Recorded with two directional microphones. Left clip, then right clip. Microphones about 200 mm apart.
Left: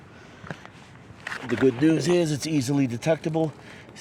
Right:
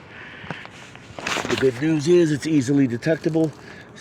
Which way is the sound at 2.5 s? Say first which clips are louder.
Right 5 dB; 50° left (ahead or behind).